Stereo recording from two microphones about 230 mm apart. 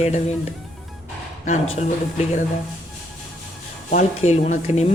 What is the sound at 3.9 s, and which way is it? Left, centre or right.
Speech, left.